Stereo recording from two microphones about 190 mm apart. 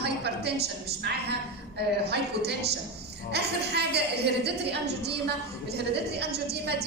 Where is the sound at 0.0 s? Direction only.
60° right (ahead or behind).